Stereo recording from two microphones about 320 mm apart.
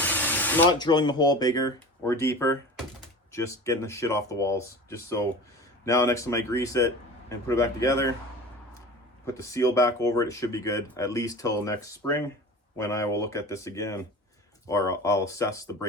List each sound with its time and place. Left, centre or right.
0.0 s speech: centre
9.2 s speech: centre